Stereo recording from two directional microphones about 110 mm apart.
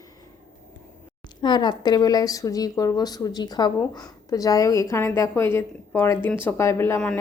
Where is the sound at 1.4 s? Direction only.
40° left (ahead or behind).